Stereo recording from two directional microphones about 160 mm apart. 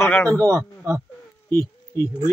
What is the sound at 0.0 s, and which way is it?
Speech, 15° left (ahead or behind).